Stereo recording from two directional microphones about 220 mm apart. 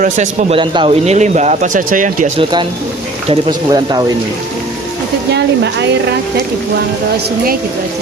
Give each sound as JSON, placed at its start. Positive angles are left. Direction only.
{"t": 0.0, "sound": "speech", "side_deg": -30}
{"t": 2.4, "sound": "speech", "side_deg": -20}
{"t": 3.7, "sound": "speech", "side_deg": -20}
{"t": 5.3, "sound": "a woman's voice", "side_deg": -50}